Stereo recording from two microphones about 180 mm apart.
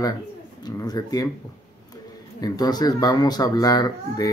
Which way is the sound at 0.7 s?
20° left (ahead or behind).